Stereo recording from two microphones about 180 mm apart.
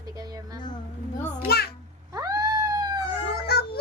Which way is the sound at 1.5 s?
60° left (ahead or behind).